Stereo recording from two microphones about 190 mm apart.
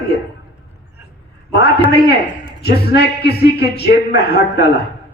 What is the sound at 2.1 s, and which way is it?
A man's voice, 60° left (ahead or behind).